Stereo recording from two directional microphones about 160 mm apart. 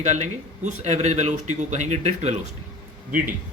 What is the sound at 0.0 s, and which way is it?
A man's voice, 45° right (ahead or behind).